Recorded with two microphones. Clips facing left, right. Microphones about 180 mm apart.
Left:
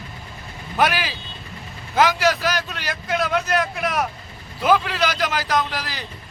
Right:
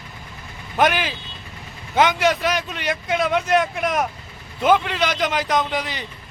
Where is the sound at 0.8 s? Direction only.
5° left (ahead or behind).